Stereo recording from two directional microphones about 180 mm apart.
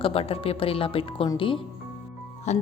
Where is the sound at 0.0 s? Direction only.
30° left (ahead or behind).